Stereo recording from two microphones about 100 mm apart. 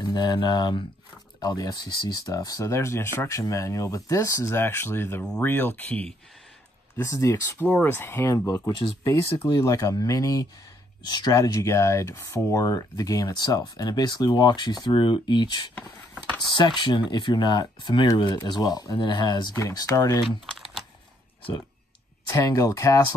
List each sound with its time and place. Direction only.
0.0 s speech: 45° left (ahead or behind); by 6.0 s 15° left (ahead or behind)
7.0 s speech: 30° left (ahead or behind)
7.5 s speech: 15° left (ahead or behind); by 20.2 s 35° left (ahead or behind)
22.3 s speech: 35° left (ahead or behind)